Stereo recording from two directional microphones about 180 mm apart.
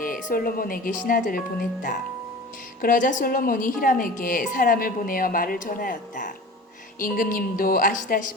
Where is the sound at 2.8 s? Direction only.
45° left (ahead or behind).